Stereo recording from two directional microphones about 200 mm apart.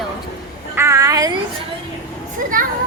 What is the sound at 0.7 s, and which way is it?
Speech, 15° right (ahead or behind).